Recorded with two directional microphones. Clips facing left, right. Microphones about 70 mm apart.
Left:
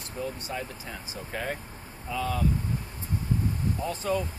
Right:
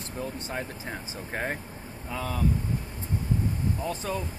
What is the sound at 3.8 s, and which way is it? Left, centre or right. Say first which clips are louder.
Speech: even; centre.